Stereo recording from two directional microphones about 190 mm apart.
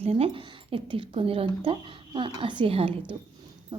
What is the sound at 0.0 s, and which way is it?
Speech, 30° right (ahead or behind).